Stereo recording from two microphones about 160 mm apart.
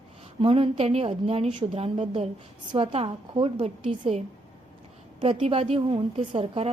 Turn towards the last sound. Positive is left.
turn(degrees=-35)  # may be behind; listen again after turning